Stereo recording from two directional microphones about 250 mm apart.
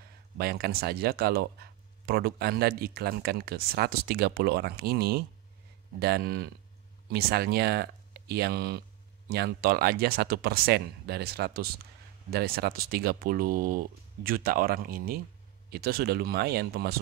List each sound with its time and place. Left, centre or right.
0.4 s speech: right